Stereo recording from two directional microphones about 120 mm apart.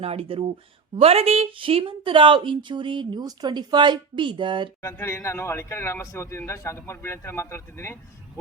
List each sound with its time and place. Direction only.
0.0 s a woman's voice: 55° right (ahead or behind)
4.8 s a man's voice: 20° left (ahead or behind)